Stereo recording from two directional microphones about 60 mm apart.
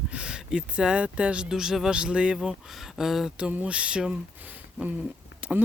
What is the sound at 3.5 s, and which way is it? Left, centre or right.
Speech, centre.